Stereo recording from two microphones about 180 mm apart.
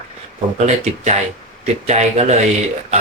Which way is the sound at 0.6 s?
40° right (ahead or behind).